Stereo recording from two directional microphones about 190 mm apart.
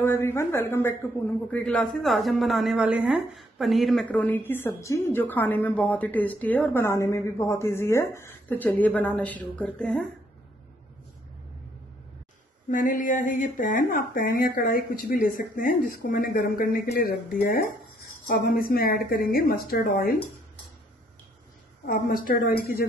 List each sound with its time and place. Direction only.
0.0 s speech: 10° left (ahead or behind)
12.7 s speech: 45° left (ahead or behind)
21.8 s speech: 50° left (ahead or behind)